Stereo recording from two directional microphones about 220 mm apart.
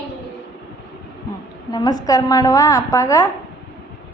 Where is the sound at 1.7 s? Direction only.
15° left (ahead or behind).